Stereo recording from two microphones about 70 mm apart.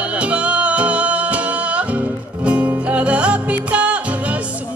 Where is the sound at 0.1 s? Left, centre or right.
Centre.